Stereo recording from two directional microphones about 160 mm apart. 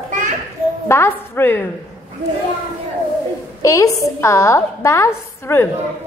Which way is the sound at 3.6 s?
20° left (ahead or behind).